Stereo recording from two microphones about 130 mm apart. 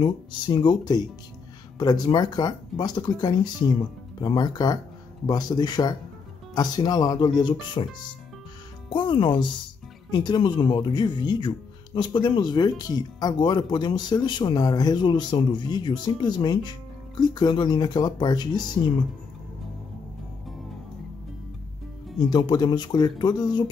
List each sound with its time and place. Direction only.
0.0 s speech: 35° left (ahead or behind)
8.9 s speech: 40° left (ahead or behind)
22.3 s speech: 35° left (ahead or behind)